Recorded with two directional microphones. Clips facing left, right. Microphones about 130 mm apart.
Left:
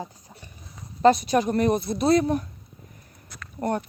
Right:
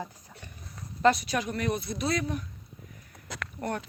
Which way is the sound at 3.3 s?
90° right.